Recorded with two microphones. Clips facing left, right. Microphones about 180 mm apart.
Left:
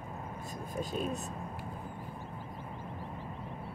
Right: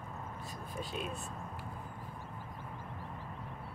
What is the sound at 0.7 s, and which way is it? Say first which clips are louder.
Speech: left 6 dB; 40° left (ahead or behind).